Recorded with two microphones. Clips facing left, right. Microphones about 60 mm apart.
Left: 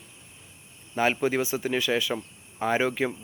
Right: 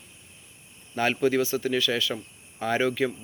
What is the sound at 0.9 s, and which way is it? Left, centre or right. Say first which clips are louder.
Speech: right 1 dB; centre.